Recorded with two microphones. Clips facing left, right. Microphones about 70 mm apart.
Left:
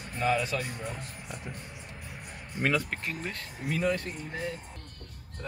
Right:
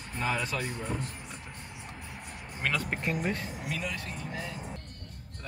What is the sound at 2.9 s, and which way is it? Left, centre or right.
Speech, centre.